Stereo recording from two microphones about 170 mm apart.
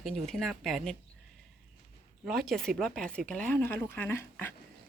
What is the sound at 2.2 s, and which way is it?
Speech, centre (ahead or behind).